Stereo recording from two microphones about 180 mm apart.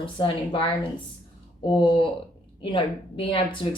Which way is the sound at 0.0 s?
30° left (ahead or behind).